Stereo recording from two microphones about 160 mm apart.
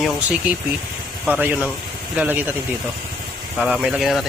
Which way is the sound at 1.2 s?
10° right (ahead or behind).